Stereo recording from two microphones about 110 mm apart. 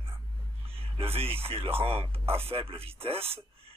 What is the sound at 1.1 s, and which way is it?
A man's voice, 60° right (ahead or behind).